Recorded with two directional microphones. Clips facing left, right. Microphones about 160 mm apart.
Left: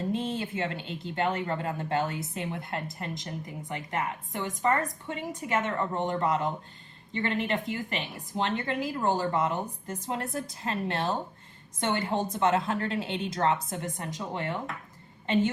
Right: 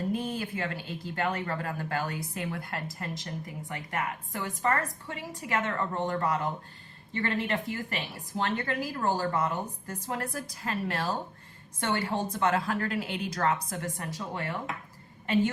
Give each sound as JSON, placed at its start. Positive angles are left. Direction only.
{"t": 0.0, "sound": "a woman's voice", "side_deg": 25}